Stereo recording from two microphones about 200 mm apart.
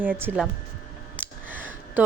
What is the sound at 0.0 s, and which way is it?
A woman's voice, 10° right (ahead or behind).